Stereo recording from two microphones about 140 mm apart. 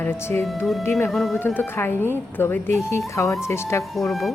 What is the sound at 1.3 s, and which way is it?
A woman's voice, 15° left (ahead or behind).